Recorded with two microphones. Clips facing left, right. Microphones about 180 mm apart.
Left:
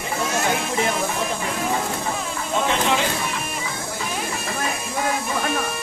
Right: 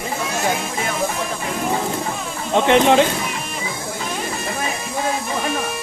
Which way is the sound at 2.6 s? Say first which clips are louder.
Right 9 dB; 65° right (ahead or behind).